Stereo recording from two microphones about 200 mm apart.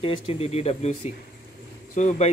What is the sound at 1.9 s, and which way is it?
Speech, 35° left (ahead or behind).